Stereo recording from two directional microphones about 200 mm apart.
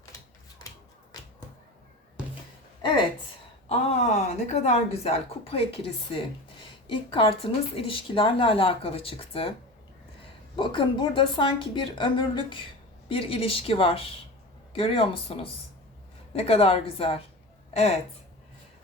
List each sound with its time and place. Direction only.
3.7 s a woman's voice: 35° left (ahead or behind)
10.6 s a woman's voice: 25° left (ahead or behind)